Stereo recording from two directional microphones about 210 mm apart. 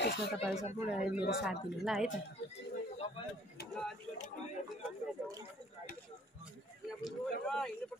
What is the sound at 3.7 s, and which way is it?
Speech, centre (ahead or behind).